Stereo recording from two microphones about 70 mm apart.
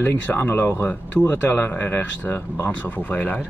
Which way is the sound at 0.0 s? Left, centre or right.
Left.